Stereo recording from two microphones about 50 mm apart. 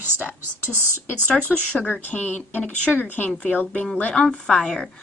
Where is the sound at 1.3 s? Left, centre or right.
Left.